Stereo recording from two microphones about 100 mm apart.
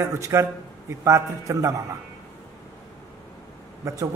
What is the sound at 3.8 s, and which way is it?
Speech, 30° right (ahead or behind).